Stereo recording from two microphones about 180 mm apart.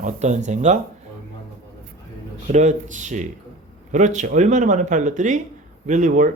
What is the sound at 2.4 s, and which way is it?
A man's voice, 40° right (ahead or behind).